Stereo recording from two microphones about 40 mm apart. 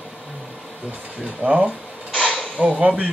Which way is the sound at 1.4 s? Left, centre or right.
Right.